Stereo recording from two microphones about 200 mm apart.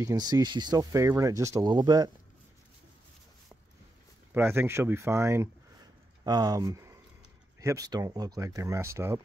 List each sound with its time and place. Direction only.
0.0 s speech: 20° right (ahead or behind)
4.3 s speech: 10° right (ahead or behind)